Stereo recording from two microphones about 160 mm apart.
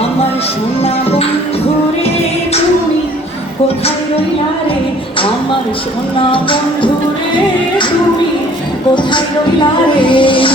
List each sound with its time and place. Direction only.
6.1 s music: 30° left (ahead or behind)
9.1 s music: 30° left (ahead or behind)